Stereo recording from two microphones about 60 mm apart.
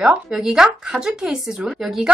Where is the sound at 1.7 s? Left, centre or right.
Centre.